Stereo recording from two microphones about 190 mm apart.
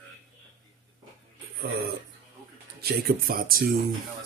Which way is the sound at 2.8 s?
55° right (ahead or behind).